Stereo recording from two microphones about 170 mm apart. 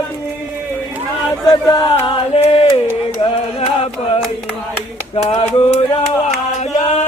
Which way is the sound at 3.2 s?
35° left (ahead or behind).